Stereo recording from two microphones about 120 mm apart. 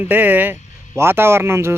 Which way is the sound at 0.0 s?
15° right (ahead or behind).